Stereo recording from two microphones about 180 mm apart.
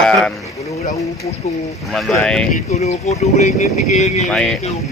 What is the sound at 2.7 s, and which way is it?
Speech, 40° left (ahead or behind).